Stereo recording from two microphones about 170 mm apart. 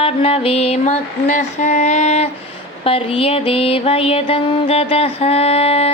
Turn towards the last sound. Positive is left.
turn(degrees=35)  # may be behind; listen again after turning